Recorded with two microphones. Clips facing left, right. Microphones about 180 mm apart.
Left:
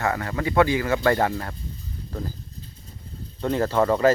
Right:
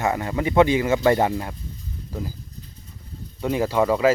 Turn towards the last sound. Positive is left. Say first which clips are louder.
# even
turn(degrees=-10)  # may be behind; listen again after turning